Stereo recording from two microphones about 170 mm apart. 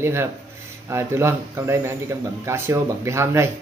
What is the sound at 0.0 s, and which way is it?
Speech, 15° right (ahead or behind).